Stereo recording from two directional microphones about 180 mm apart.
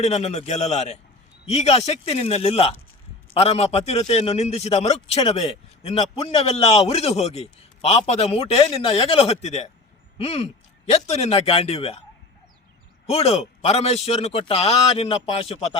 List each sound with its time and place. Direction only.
0.0 s a man's voice: 40° left (ahead or behind)
13.1 s a man's voice: 35° left (ahead or behind)